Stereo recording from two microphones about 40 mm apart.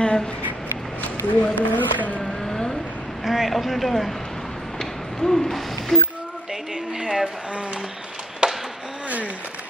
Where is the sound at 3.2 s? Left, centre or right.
Centre.